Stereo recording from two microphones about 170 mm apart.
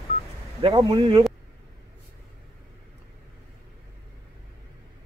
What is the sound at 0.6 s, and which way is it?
Speech, 25° right (ahead or behind).